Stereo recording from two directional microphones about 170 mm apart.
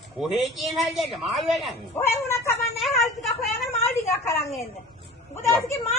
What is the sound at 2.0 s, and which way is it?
Speech, 15° left (ahead or behind).